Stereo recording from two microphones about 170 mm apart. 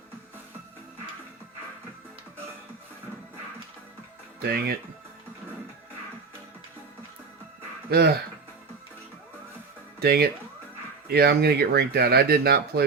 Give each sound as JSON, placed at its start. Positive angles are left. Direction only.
{"t": 4.4, "sound": "speech", "side_deg": -70}
{"t": 7.9, "sound": "speech", "side_deg": -70}
{"t": 10.0, "sound": "speech", "side_deg": -70}